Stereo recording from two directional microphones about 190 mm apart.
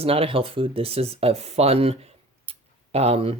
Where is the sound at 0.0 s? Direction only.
30° right (ahead or behind).